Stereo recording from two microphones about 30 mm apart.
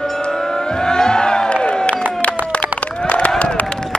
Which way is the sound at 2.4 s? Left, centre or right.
Left.